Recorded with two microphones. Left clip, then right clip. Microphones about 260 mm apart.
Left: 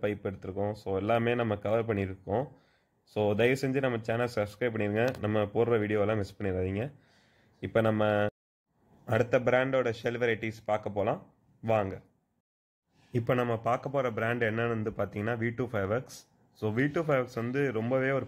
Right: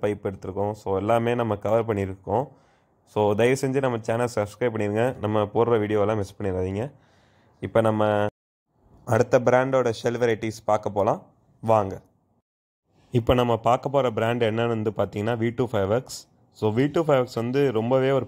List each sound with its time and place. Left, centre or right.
0.0 s a man's voice: centre
9.0 s speech: centre
13.1 s a man's voice: right